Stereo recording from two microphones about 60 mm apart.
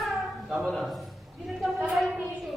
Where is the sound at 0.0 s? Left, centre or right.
Centre.